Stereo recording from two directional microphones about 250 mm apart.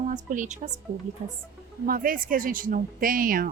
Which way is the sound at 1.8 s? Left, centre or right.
Right.